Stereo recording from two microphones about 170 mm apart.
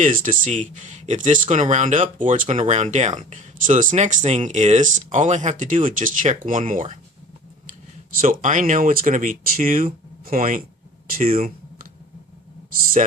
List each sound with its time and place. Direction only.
0.0 s speech: 50° right (ahead or behind)
8.2 s speech: 50° right (ahead or behind)
11.3 s a sound: 55° right (ahead or behind)